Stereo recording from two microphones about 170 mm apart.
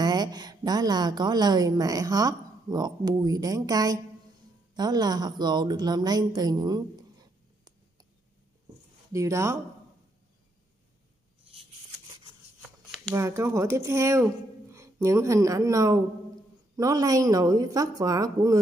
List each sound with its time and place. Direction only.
0.0 s a woman's voice: 25° right (ahead or behind)
9.1 s a woman's voice: 15° right (ahead or behind)
13.1 s a woman's voice: 15° right (ahead or behind)